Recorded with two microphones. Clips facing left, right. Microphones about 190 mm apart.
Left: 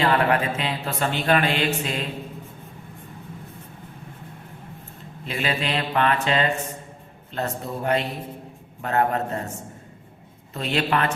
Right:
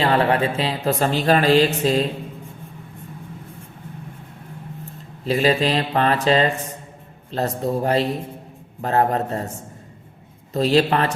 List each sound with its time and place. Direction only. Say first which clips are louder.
0.0 s speech: right 2 dB; 30° right (ahead or behind)
5.2 s speech: right 8 dB; 35° right (ahead or behind)
10.5 s speech: right 7 dB; 35° right (ahead or behind)